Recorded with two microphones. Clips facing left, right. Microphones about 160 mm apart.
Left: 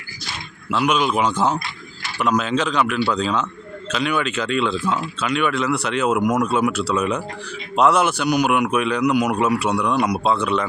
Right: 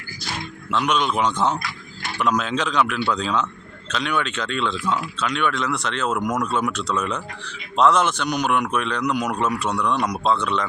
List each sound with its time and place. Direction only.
0.7 s a man's voice: 5° left (ahead or behind)